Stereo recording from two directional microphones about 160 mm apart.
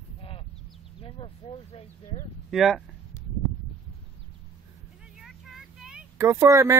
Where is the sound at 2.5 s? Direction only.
Centre (ahead or behind).